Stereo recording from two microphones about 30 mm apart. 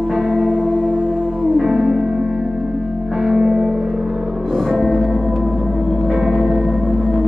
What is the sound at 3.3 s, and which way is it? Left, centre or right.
Music, centre.